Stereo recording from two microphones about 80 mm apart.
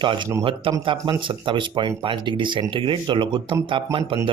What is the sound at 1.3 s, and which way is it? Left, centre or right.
Speech, right.